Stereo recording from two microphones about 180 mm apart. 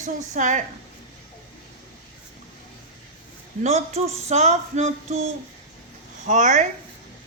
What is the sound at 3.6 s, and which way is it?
Speech, 40° right (ahead or behind).